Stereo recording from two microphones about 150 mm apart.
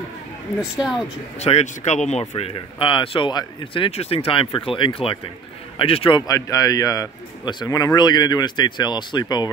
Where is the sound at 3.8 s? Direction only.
40° left (ahead or behind).